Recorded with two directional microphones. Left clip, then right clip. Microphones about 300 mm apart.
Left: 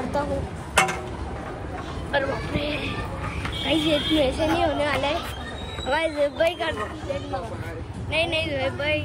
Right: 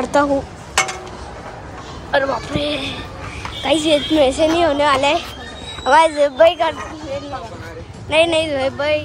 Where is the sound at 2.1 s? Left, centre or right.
Centre.